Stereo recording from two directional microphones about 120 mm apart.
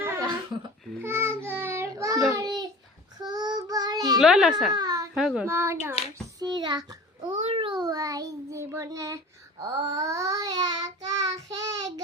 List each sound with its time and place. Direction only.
0.0 s a sound: 20° right (ahead or behind)
1.0 s child singing: 20° right (ahead or behind)
2.3 s a sound: 35° right (ahead or behind)
3.2 s child singing: 35° right (ahead or behind)
4.2 s a child's voice: 5° right (ahead or behind)
4.7 s baby cry: 35° right (ahead or behind)
5.1 s a child's voice: 5° right (ahead or behind)
5.5 s a child's voice: 20° right (ahead or behind)
6.4 s a child's voice: 40° right (ahead or behind)
7.4 s a sound: 55° right (ahead or behind)
7.7 s child singing: 35° right (ahead or behind)